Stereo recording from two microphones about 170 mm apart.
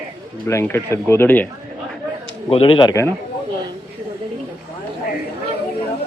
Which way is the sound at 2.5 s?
30° left (ahead or behind).